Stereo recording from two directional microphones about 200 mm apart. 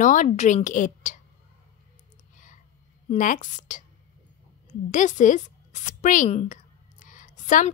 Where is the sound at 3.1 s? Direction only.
40° left (ahead or behind).